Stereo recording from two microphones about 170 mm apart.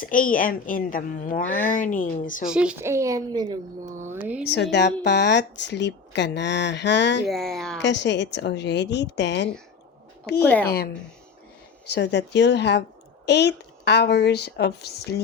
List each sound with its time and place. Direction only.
0.0 s a woman's voice: 55° left (ahead or behind)
2.5 s a woman's voice: 5° right (ahead or behind); by 3.6 s 25° right (ahead or behind)
4.0 s a woman's voice: 15° right (ahead or behind)
4.5 s speech: 90° left
7.3 s speech: centre (ahead or behind)
7.8 s speech: 90° left
10.4 s a woman's voice: 10° left (ahead or behind)
11.9 s speech: 90° left; by 15.1 s 70° left (ahead or behind)